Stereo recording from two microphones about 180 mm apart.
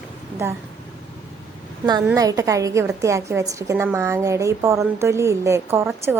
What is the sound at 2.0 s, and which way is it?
Speech, 20° right (ahead or behind).